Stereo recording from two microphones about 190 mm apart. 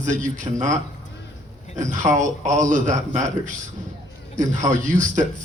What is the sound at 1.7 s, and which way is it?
A man's voice, 40° right (ahead or behind).